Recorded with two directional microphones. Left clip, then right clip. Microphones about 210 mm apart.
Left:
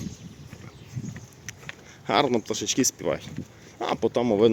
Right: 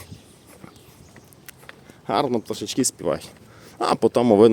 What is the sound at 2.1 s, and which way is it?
Speech, 10° right (ahead or behind).